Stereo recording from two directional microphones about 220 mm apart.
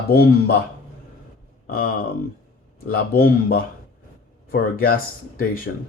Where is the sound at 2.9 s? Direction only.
40° left (ahead or behind).